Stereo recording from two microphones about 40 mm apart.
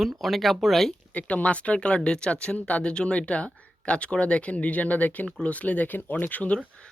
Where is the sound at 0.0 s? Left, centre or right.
Centre.